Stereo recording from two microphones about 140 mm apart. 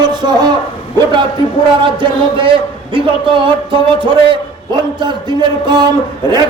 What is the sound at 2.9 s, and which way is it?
A man's voice, 35° right (ahead or behind).